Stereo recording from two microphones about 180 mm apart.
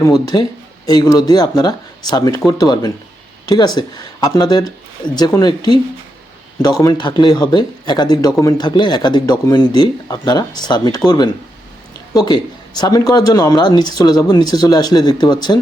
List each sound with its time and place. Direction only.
0.3 s speech: 25° left (ahead or behind)